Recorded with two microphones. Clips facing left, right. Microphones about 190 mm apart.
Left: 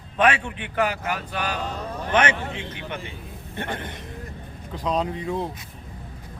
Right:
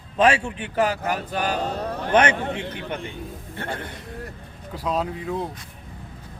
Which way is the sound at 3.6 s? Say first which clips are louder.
Left 1 dB; 20° left (ahead or behind).